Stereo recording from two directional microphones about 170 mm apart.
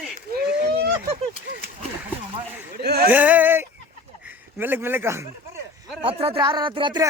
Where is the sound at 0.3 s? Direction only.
65° right (ahead or behind).